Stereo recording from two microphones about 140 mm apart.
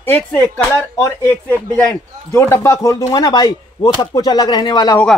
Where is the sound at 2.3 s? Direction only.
20° left (ahead or behind).